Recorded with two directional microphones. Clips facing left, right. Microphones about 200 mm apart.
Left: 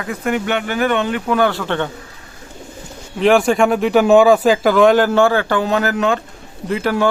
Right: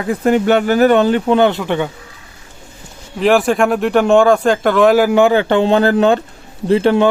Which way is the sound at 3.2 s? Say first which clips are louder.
Even; centre (ahead or behind).